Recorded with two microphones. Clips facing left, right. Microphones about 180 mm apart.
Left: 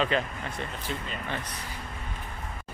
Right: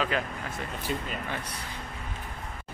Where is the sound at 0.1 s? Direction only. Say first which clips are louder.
Left 2 dB; 5° right (ahead or behind).